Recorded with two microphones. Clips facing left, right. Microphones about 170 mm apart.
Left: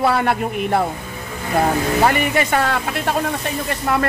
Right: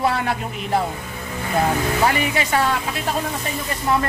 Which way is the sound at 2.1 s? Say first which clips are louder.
Left 3 dB; 55° left (ahead or behind).